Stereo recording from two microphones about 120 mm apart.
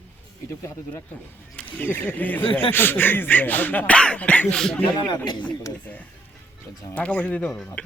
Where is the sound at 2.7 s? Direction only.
15° left (ahead or behind).